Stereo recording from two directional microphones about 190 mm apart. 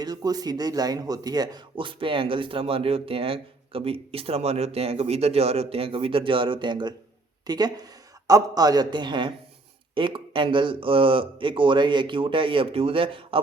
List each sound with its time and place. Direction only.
0.0 s speech: 20° right (ahead or behind)